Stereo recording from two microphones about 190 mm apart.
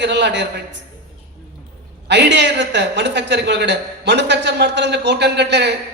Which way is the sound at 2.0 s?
65° right (ahead or behind).